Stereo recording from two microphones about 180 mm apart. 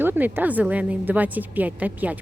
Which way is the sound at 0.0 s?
10° right (ahead or behind).